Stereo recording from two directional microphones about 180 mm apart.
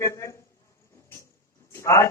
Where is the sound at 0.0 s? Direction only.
15° left (ahead or behind).